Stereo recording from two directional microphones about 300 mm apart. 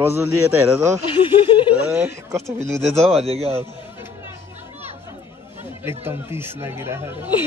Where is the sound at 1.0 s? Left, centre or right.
Centre.